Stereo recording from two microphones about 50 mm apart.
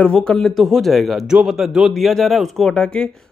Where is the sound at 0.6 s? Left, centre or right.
Centre.